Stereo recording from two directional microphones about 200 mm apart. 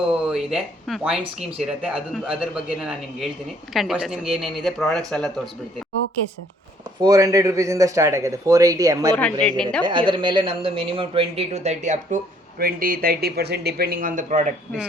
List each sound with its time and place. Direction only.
0.0 s speech: 5° right (ahead or behind)
7.0 s speech: 15° right (ahead or behind)
9.1 s a woman's voice: 5° left (ahead or behind)
9.8 s speech: 25° right (ahead or behind); by 14.4 s 40° right (ahead or behind)